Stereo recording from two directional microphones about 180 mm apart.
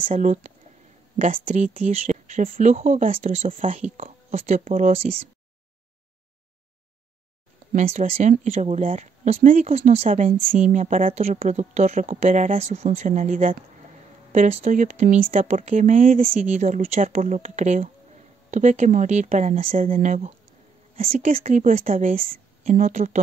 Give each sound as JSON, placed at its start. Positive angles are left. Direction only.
{"t": 0.0, "sound": "speech", "side_deg": -40}
{"t": 3.7, "sound": "speech", "side_deg": -35}
{"t": 7.7, "sound": "speech", "side_deg": -40}